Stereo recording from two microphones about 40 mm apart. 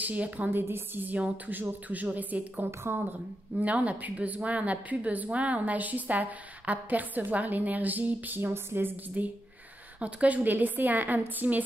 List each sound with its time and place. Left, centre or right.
0.0 s a woman's voice: right
0.5 s a woman's voice: right
1.5 s a woman's voice: right
2.8 s a woman's voice: right
3.5 s speech: right
8.4 s a woman's voice: right
9.2 s a woman's voice: right